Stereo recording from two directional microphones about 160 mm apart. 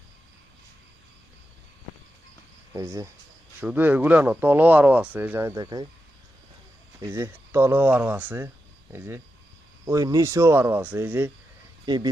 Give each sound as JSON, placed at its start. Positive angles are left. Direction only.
{"t": 2.7, "sound": "speech", "side_deg": -20}
{"t": 5.6, "sound": "speech", "side_deg": -30}
{"t": 7.1, "sound": "speech", "side_deg": -15}
{"t": 11.9, "sound": "speech", "side_deg": -25}